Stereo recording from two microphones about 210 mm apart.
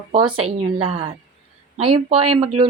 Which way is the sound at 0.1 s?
20° right (ahead or behind).